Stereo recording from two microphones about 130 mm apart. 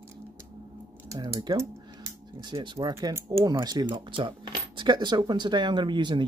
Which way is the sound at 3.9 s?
40° right (ahead or behind).